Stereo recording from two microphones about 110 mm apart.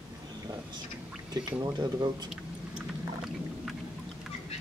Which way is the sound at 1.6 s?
40° right (ahead or behind).